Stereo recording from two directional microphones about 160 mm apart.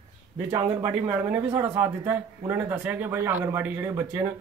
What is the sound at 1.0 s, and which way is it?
Speech, 15° right (ahead or behind).